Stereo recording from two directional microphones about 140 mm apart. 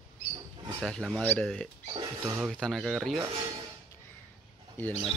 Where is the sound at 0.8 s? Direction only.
5° left (ahead or behind).